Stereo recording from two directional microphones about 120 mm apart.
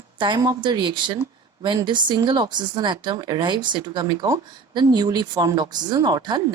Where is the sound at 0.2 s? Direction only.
35° right (ahead or behind).